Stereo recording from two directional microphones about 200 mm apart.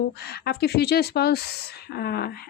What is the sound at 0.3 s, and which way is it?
Speech, 55° left (ahead or behind).